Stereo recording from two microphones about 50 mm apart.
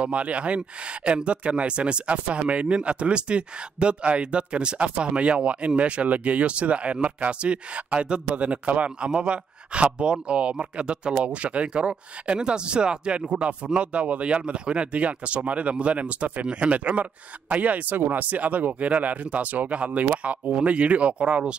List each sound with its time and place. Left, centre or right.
0.0 s speech: right